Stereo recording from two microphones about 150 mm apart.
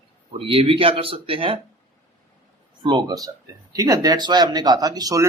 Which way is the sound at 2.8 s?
30° right (ahead or behind).